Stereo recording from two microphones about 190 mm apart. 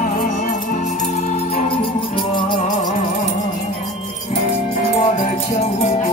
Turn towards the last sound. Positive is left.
turn(degrees=35)  # may be behind; listen again after turning